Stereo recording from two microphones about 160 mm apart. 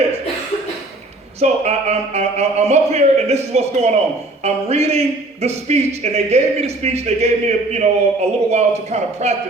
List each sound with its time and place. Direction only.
1.4 s speech: 40° right (ahead or behind)
4.4 s music: 40° right (ahead or behind)
5.4 s speech: 40° right (ahead or behind)